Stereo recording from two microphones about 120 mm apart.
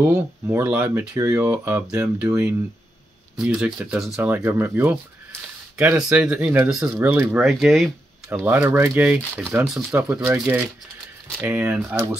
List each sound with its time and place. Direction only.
0.0 s speech: 20° right (ahead or behind)
4.2 s speech: 15° right (ahead or behind)
7.4 s speech: centre (ahead or behind)
8.4 s speech: 15° right (ahead or behind)